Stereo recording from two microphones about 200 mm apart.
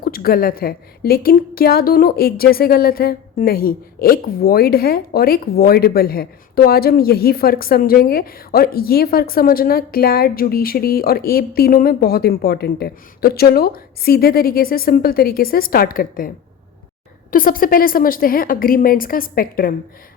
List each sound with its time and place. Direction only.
0.0 s a woman's voice: 50° left (ahead or behind)
17.3 s a woman's voice: 45° left (ahead or behind)